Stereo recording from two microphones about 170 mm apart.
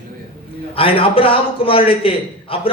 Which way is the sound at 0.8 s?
35° left (ahead or behind).